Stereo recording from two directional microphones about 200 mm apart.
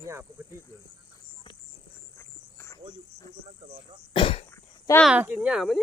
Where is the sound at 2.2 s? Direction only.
15° left (ahead or behind).